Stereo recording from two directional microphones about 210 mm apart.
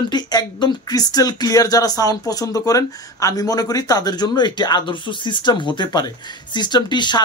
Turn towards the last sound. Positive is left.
turn(degrees=20)  # may be behind; listen again after turning